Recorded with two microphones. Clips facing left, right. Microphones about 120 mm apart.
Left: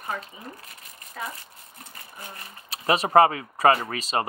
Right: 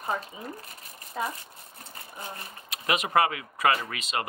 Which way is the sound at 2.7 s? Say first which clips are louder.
Left 6 dB; 35° left (ahead or behind).